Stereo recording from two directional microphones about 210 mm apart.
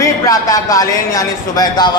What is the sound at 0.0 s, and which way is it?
A man's voice, 15° left (ahead or behind).